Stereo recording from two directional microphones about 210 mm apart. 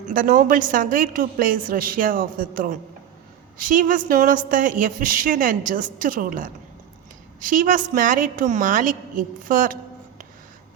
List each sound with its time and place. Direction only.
0.1 s a woman's voice: 40° right (ahead or behind)